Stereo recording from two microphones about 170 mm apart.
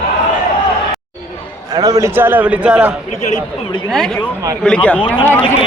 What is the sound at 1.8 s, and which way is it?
A man's voice, 20° right (ahead or behind).